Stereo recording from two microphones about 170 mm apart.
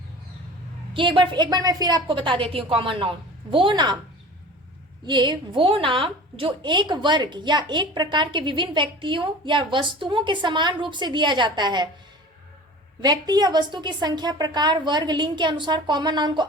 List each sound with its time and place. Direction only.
0.9 s a woman's voice: 30° right (ahead or behind)
5.0 s a woman's voice: 25° right (ahead or behind)
13.0 s a woman's voice: 25° right (ahead or behind)